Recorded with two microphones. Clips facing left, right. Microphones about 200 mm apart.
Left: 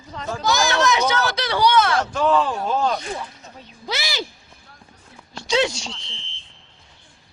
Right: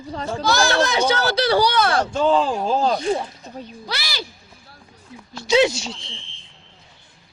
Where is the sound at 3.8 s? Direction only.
20° left (ahead or behind).